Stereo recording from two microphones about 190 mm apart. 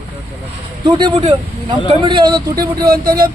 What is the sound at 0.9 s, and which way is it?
Speech, 25° right (ahead or behind).